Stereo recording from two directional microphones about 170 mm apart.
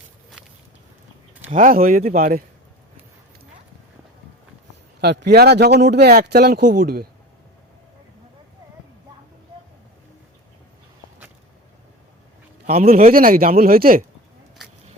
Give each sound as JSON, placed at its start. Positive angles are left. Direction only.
{"t": 1.5, "sound": "a man's voice", "side_deg": -55}
{"t": 4.9, "sound": "speech", "side_deg": -75}
{"t": 12.7, "sound": "a man's voice", "side_deg": -40}